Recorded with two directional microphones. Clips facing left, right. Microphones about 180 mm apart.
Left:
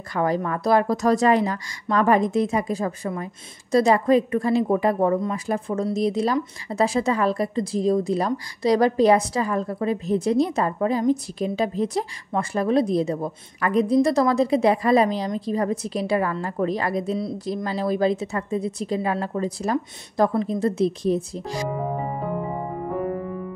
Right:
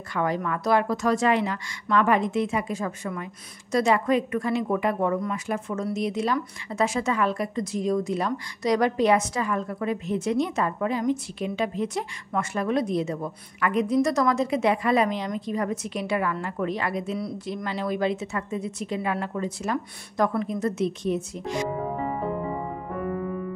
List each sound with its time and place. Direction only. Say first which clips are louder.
0.1 s speech: left 3 dB; 35° left (ahead or behind)